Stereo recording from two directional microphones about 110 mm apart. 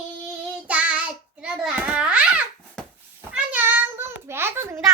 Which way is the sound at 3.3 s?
15° right (ahead or behind).